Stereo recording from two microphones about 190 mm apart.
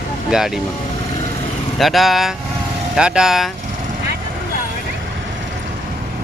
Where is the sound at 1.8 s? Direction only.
Centre (ahead or behind).